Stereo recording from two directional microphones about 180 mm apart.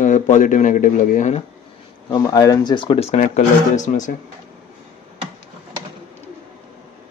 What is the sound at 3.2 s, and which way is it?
Speech, 45° left (ahead or behind).